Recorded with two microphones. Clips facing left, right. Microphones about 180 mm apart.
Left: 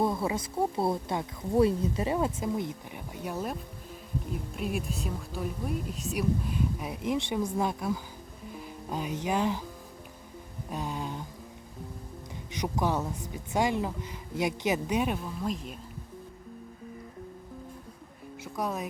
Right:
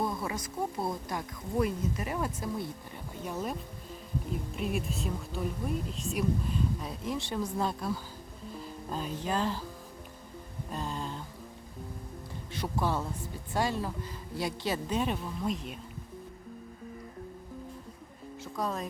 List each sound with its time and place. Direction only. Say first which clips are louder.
0.0 s speech: left 5 dB; 25° left (ahead or behind); by 6.2 s 5° left (ahead or behind)
6.7 s a woman's voice: left 4 dB; 15° left (ahead or behind)
10.7 s a sound: left 2 dB; 10° left (ahead or behind)
12.5 s a woman's voice: left 2 dB; 15° left (ahead or behind); by 15.8 s centre (ahead or behind)
18.4 s speech: left 1 dB; 15° left (ahead or behind)